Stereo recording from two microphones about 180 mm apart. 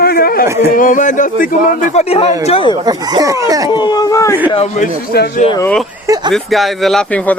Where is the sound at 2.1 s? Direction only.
30° left (ahead or behind).